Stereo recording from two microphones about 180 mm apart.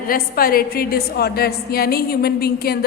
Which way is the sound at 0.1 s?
55° left (ahead or behind).